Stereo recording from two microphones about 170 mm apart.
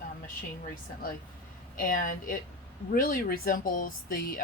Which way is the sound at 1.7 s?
55° left (ahead or behind).